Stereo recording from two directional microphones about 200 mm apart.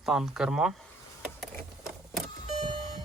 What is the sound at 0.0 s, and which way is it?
Speech, centre (ahead or behind).